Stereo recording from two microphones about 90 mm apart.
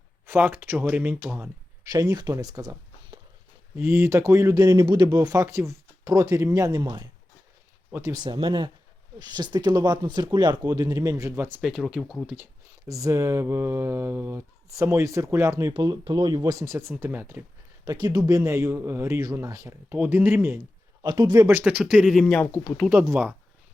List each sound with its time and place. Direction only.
0.3 s speech: 25° right (ahead or behind)
1.9 s speech: 40° right (ahead or behind)
3.8 s speech: 25° right (ahead or behind); by 8.4 s 45° right (ahead or behind)
8.4 s speech: 70° right (ahead or behind)
9.1 s speech: 50° right (ahead or behind); by 11.4 s 35° right (ahead or behind)
11.6 s speech: 5° right (ahead or behind)
12.9 s speech: 35° right (ahead or behind)
15.7 s speech: 55° right (ahead or behind)
16.6 s speech: 25° right (ahead or behind)
17.8 s speech: 45° right (ahead or behind); by 20.7 s 25° right (ahead or behind)
21.0 s speech: 50° right (ahead or behind)
21.6 s speech: 15° right (ahead or behind)
22.1 s speech: 5° left (ahead or behind)
22.5 s speech: 35° left (ahead or behind)